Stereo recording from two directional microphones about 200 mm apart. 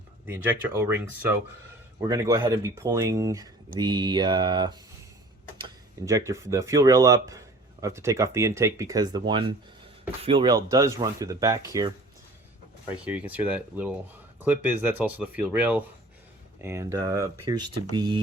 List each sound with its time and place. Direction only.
0.3 s speech: 10° right (ahead or behind)